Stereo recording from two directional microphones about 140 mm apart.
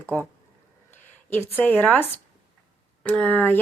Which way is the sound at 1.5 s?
15° left (ahead or behind).